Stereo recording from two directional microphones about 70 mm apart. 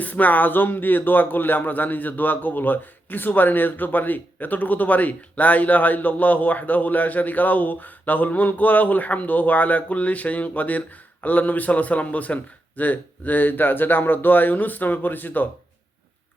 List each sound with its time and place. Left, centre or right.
0.0 s speech: left